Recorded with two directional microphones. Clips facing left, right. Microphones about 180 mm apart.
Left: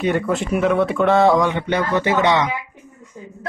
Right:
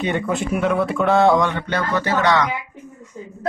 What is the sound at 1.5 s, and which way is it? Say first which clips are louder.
Speech: left 3 dB; 15° left (ahead or behind).